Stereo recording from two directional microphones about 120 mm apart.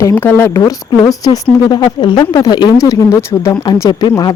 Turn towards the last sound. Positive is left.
turn(degrees=35)  # may be behind; listen again after turning